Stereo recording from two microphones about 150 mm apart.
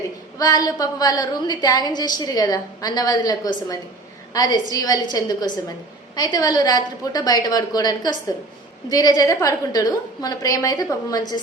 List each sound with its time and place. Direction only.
0.3 s a woman's voice: 25° left (ahead or behind)